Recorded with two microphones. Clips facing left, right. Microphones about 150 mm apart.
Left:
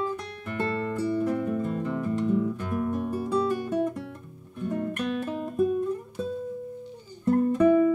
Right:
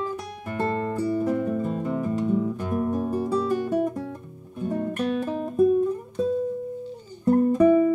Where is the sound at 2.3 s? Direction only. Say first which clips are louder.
Right 2 dB; 40° right (ahead or behind).